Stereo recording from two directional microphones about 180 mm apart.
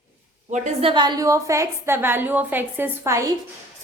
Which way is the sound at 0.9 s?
25° right (ahead or behind).